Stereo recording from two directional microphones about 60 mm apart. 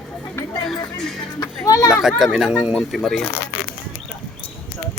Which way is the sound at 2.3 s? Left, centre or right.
Centre.